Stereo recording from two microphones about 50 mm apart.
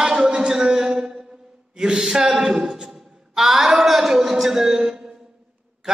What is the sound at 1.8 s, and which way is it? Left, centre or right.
A man's voice, centre.